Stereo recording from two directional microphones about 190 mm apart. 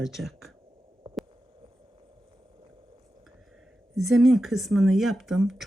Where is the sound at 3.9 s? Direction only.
Centre (ahead or behind).